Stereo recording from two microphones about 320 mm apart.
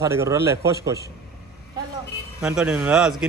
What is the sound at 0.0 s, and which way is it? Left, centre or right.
Speech, centre.